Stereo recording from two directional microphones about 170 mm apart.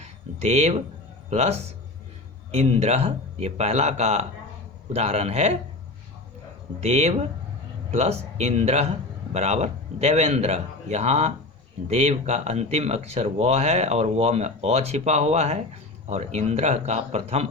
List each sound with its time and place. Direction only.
0.0 s speech: 40° right (ahead or behind)
6.7 s speech: 40° right (ahead or behind)